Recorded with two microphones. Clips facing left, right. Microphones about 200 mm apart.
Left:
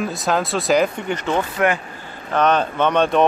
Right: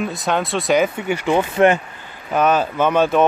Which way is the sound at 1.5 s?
25° right (ahead or behind).